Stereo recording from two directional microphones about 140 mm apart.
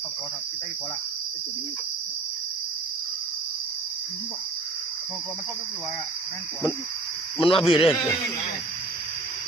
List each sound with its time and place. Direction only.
7.3 s speech: 40° left (ahead or behind)